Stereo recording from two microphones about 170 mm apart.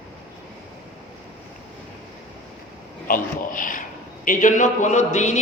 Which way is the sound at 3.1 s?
55° left (ahead or behind).